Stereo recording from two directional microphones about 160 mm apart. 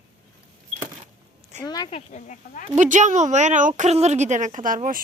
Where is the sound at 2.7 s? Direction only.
50° right (ahead or behind).